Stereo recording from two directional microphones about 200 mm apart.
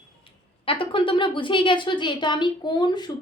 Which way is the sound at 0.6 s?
25° left (ahead or behind).